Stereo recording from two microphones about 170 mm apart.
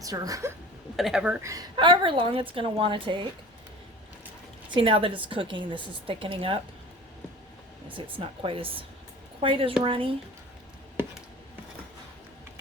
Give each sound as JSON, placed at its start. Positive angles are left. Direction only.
{"t": 0.0, "sound": "a woman's voice", "side_deg": -20}
{"t": 0.9, "sound": "speech", "side_deg": 0}
{"t": 1.4, "sound": "a woman's voice", "side_deg": -20}
{"t": 4.7, "sound": "a woman's voice", "side_deg": -30}
{"t": 8.2, "sound": "a woman's voice", "side_deg": -30}